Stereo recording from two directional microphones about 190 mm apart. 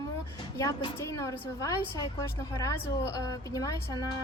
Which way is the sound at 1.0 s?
15° left (ahead or behind).